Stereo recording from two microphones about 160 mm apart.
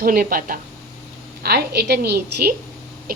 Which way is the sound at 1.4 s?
90° right.